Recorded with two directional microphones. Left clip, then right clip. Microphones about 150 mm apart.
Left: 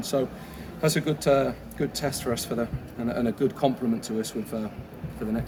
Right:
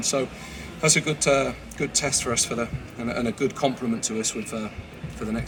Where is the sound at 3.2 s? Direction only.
25° left (ahead or behind).